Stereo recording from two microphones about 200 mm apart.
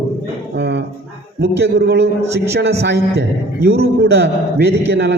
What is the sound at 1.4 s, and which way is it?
A man's voice, 60° right (ahead or behind).